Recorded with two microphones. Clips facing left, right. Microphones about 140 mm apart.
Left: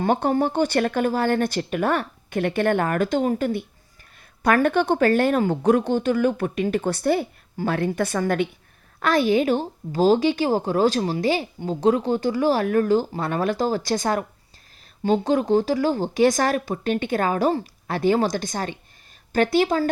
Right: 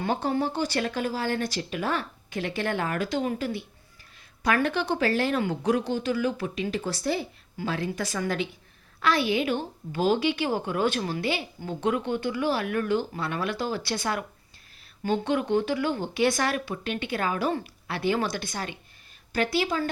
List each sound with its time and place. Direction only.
0.0 s a woman's voice: 50° left (ahead or behind)